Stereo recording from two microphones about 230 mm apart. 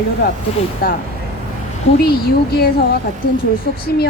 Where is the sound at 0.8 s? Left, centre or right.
Left.